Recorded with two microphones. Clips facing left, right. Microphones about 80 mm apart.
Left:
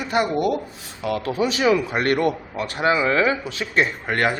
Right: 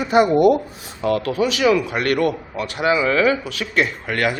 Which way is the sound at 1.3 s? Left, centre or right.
Left.